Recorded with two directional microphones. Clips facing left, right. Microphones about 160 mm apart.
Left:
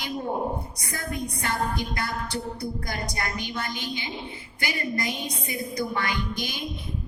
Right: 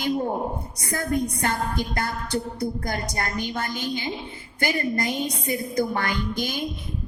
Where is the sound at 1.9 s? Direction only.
45° right (ahead or behind).